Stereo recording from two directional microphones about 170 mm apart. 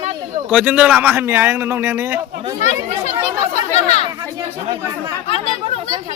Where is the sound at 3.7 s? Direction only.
40° left (ahead or behind).